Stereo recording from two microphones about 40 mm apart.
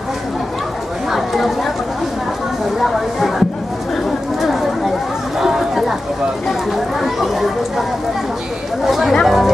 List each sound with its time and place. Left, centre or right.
1.1 s chatter: centre
2.8 s speech: centre
4.4 s chatter: centre
5.4 s a sound: centre
7.0 s a sound: centre
8.8 s chatter: centre
9.2 s music: centre